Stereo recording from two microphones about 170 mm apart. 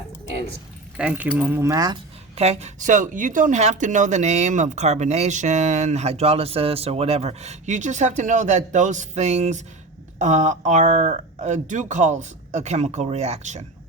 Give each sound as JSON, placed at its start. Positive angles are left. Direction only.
{"t": 0.9, "sound": "speech", "side_deg": -5}
{"t": 2.3, "sound": "speech", "side_deg": -35}